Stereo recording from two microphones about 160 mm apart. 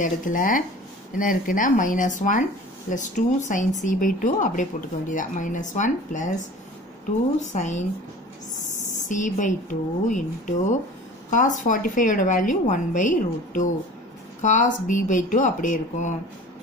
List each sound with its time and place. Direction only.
0.0 s speech: 55° left (ahead or behind)